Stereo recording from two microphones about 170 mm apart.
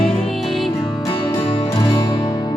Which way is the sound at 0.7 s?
30° left (ahead or behind).